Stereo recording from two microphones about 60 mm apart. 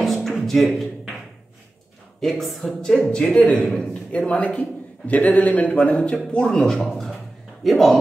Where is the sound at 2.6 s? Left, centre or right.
Centre.